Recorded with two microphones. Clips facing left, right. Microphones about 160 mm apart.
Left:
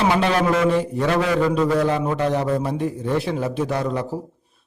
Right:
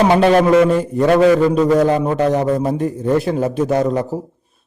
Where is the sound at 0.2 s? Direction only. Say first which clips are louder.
Right 8 dB; 45° right (ahead or behind).